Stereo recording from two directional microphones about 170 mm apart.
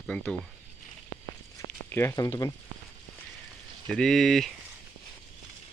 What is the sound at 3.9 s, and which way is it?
Speech, centre (ahead or behind).